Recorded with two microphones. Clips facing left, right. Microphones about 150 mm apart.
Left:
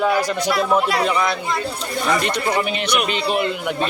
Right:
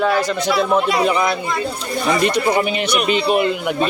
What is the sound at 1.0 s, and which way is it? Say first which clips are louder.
A man's voice: right 3 dB; 10° right (ahead or behind).